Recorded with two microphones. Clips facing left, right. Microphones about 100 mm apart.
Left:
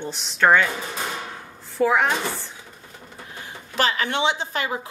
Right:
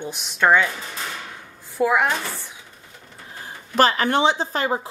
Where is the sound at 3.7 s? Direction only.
45° right (ahead or behind).